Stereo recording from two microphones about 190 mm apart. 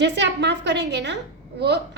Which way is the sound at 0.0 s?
65° right (ahead or behind).